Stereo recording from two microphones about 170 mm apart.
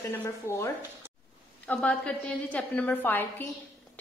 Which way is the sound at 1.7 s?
10° left (ahead or behind).